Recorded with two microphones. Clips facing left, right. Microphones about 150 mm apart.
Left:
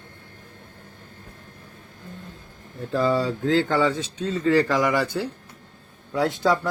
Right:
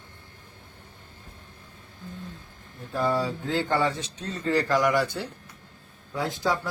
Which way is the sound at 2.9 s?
90° left.